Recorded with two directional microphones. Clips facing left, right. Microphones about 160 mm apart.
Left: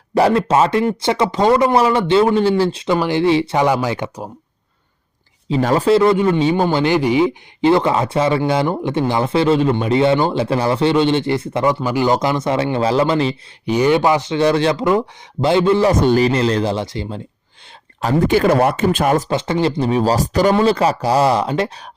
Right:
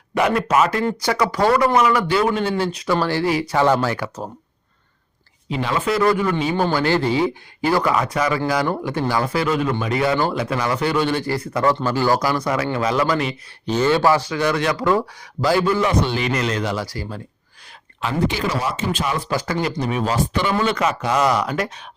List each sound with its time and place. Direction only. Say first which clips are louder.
0.1 s speech: left 4 dB; 35° left (ahead or behind)
3.6 s speech: left 1 dB; 15° left (ahead or behind)
5.5 s speech: left 7 dB; 40° left (ahead or behind)
13.7 s speech: left 2 dB; 15° left (ahead or behind)
15.9 s speech: left 7 dB; 45° left (ahead or behind)
16.3 s speech: left 5 dB; 30° left (ahead or behind)
18.0 s speech: left 7 dB; 50° left (ahead or behind)
19.3 s speech: left 5 dB; 25° left (ahead or behind)